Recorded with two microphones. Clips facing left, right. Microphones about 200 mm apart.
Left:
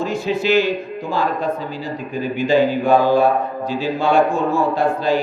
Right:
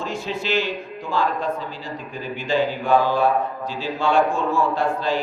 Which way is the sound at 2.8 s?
40° left (ahead or behind).